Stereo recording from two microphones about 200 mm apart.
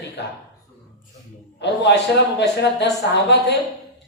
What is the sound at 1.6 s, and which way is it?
A woman's voice, 60° left (ahead or behind).